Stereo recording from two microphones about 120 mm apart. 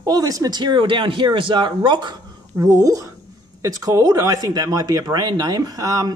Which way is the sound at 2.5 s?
30° right (ahead or behind).